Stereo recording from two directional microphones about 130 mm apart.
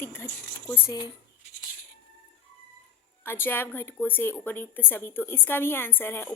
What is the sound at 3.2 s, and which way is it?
A woman's voice, 15° left (ahead or behind).